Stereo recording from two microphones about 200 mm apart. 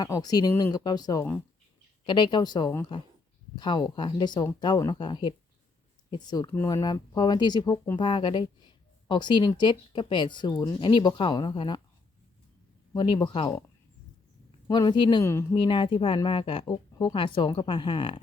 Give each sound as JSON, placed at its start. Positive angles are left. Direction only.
{"t": 0.0, "sound": "speech", "side_deg": 20}
{"t": 12.9, "sound": "speech", "side_deg": 20}
{"t": 14.7, "sound": "speech", "side_deg": 20}